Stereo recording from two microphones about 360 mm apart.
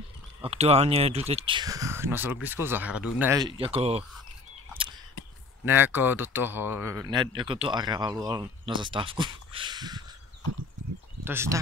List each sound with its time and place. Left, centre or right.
0.4 s speech: centre
5.7 s speech: centre
11.2 s speech: centre